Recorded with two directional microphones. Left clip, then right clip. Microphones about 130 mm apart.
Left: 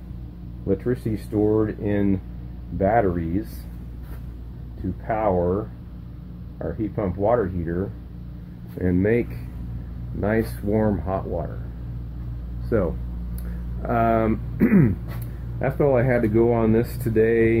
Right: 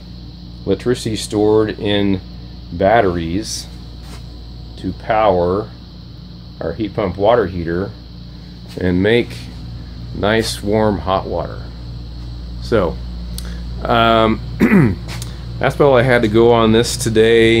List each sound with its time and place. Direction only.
0.7 s speech: 20° right (ahead or behind)
5.0 s speech: 20° right (ahead or behind)
6.6 s speech: 20° right (ahead or behind)
10.2 s speech: 10° right (ahead or behind)
10.7 s speech: 20° right (ahead or behind)
12.7 s speech: 15° right (ahead or behind)